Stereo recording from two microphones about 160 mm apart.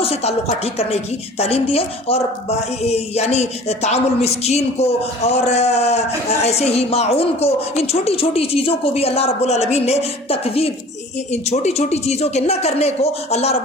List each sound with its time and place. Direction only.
0.0 s speech: 40° left (ahead or behind)